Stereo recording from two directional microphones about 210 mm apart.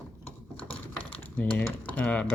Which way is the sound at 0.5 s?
5° left (ahead or behind).